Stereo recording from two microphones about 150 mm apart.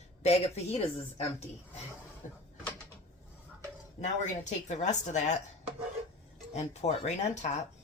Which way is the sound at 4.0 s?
50° left (ahead or behind).